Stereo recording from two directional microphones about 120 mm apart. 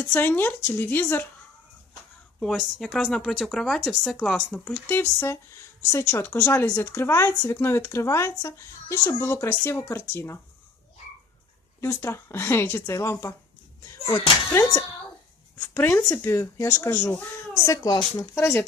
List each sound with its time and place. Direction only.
0.0 s speech: 15° left (ahead or behind)
2.4 s speech: 5° left (ahead or behind)
4.6 s speech: 15° left (ahead or behind)
11.8 s speech: 20° left (ahead or behind)
16.9 s speech: 15° left (ahead or behind)
17.7 s speech: 30° left (ahead or behind)